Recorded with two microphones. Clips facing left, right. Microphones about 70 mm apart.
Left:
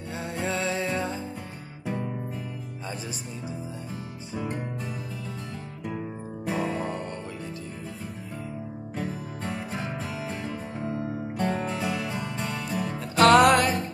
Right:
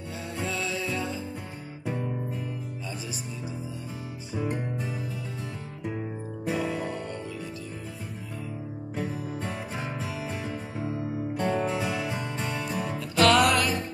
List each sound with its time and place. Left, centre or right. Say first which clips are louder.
0.4 s music: left 3 dB; left
6.5 s music: left 1 dB; left
8.9 s music: right 2 dB; centre
13.1 s music: left 4 dB; left